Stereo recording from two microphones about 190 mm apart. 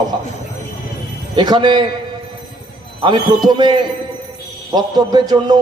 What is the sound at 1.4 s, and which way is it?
Music, 25° right (ahead or behind).